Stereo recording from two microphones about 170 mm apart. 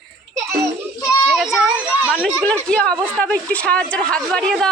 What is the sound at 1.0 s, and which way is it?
Children playing, centre (ahead or behind).